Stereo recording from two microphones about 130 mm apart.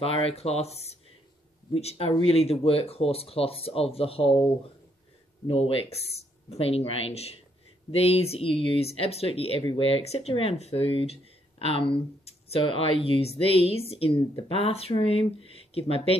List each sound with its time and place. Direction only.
0.0 s speech: 50° left (ahead or behind)
5.5 s speech: 50° left (ahead or behind)